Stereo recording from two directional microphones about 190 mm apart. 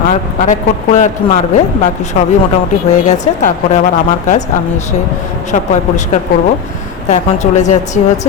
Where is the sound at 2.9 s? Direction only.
40° left (ahead or behind).